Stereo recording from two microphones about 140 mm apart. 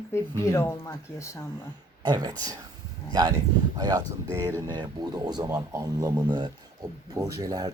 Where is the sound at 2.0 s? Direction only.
30° right (ahead or behind).